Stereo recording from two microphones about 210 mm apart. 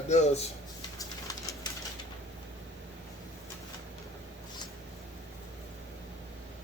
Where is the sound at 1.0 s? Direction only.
15° left (ahead or behind).